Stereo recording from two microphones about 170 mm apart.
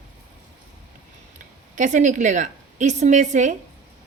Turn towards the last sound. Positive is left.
turn(degrees=-45)  # may be behind; listen again after turning